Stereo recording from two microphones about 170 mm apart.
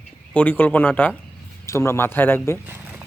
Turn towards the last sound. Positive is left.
turn(degrees=-10)  # may be behind; listen again after turning